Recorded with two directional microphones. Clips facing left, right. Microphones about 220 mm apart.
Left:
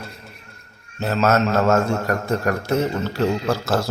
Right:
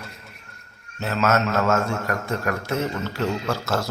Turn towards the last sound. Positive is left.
turn(degrees=35)  # may be behind; listen again after turning